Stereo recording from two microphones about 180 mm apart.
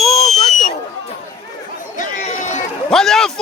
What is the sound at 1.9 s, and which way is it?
Chatter, 40° left (ahead or behind).